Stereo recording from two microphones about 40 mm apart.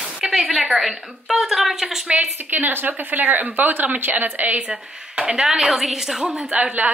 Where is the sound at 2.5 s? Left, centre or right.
Right.